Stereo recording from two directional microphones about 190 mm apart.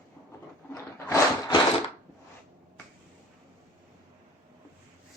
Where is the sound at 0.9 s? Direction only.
15° left (ahead or behind).